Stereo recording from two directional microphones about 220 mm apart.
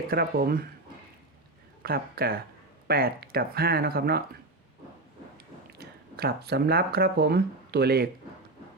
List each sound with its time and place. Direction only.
0.1 s speech: 45° right (ahead or behind)
1.8 s speech: 45° right (ahead or behind)
5.7 s speech: 45° right (ahead or behind)